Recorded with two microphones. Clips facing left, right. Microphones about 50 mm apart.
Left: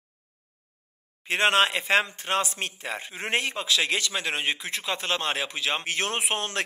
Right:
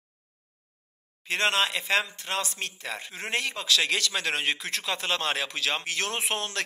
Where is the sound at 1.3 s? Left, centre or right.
Left.